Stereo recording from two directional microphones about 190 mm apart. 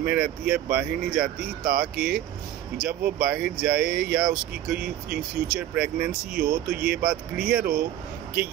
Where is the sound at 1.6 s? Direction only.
50° right (ahead or behind).